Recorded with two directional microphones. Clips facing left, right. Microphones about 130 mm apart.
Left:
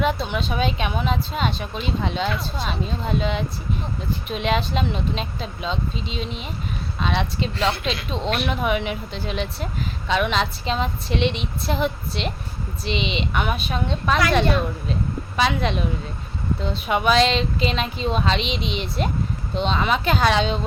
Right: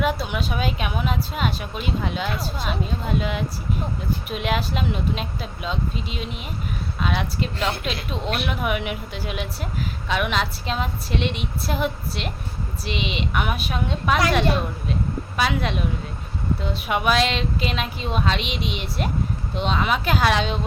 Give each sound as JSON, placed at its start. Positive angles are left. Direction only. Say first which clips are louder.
{"t": 0.0, "sound": "a woman's voice", "louder": "left 1 dB", "side_deg": -5}
{"t": 15.4, "sound": "a woman's voice", "louder": "left 2 dB", "side_deg": -5}